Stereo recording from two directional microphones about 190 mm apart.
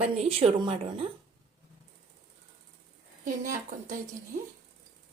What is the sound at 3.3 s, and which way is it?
Speech, 45° right (ahead or behind).